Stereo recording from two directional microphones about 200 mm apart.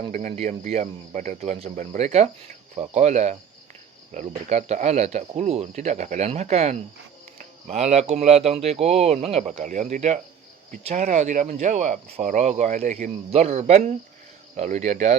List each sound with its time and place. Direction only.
0.1 s speech: 40° right (ahead or behind)